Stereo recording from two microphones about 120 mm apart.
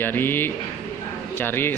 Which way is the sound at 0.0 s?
20° left (ahead or behind).